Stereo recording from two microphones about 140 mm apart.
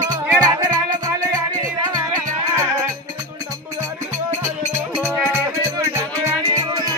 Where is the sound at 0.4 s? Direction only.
25° right (ahead or behind).